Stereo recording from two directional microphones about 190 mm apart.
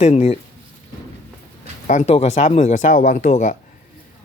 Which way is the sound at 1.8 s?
40° left (ahead or behind).